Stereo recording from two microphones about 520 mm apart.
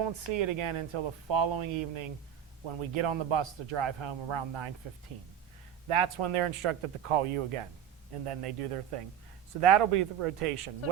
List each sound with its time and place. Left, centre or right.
0.0 s speech: right
5.9 s speech: right